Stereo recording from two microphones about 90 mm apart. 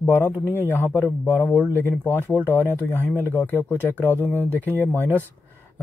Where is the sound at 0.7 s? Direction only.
20° left (ahead or behind).